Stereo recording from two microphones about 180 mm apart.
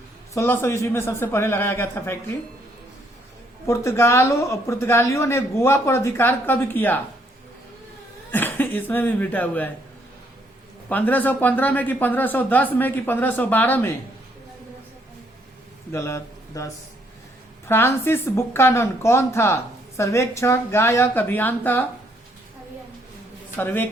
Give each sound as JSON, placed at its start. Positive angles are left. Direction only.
{"t": 0.3, "sound": "speech", "side_deg": 10}
{"t": 3.7, "sound": "speech", "side_deg": 15}
{"t": 8.3, "sound": "speech", "side_deg": 10}
{"t": 10.8, "sound": "speech", "side_deg": 10}
{"t": 15.9, "sound": "speech", "side_deg": 15}
{"t": 23.6, "sound": "speech", "side_deg": 10}